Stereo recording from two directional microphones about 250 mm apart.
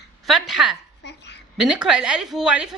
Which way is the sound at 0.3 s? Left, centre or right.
Centre.